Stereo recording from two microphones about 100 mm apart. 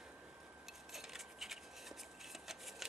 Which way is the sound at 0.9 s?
5° right (ahead or behind).